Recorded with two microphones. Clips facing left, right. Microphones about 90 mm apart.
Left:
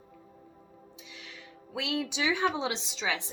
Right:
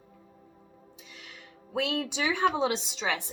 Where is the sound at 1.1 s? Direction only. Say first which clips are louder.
Left 1 dB; 45° right (ahead or behind).